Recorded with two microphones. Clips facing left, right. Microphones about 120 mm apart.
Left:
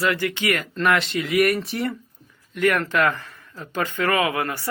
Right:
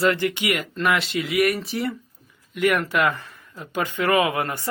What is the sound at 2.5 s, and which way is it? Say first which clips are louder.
Speech: even; 15° right (ahead or behind).